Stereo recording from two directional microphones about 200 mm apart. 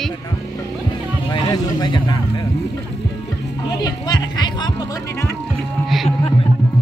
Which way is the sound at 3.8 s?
20° left (ahead or behind).